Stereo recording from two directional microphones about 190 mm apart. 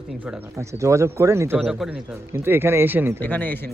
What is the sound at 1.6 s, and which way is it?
Speech, centre (ahead or behind).